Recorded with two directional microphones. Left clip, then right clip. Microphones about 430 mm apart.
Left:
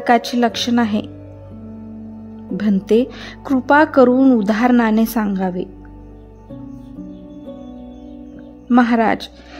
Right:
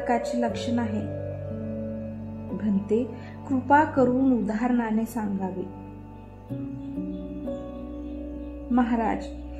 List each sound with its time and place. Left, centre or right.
0.0 s a woman's voice: left
2.5 s a woman's voice: left
8.7 s a woman's voice: left